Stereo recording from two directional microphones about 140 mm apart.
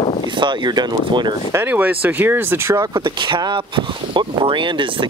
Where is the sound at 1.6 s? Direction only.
10° right (ahead or behind).